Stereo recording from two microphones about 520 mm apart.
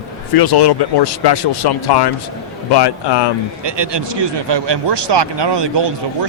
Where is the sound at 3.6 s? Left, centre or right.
Right.